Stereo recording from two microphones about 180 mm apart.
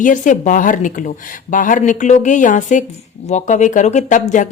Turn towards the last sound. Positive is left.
turn(degrees=45)  # may be behind; listen again after turning